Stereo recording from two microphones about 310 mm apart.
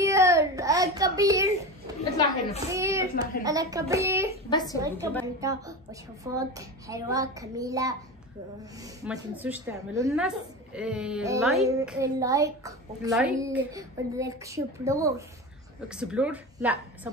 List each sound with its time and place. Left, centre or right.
0.0 s a sound: centre
2.0 s a woman's voice: centre
2.7 s a woman's voice: centre
4.5 s a woman's voice: centre
5.2 s a woman's voice: centre